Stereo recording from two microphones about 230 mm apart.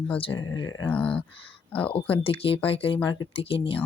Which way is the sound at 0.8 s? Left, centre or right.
Centre.